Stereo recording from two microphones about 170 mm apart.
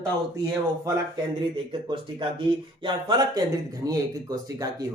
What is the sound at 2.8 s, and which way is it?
Speech, 25° right (ahead or behind).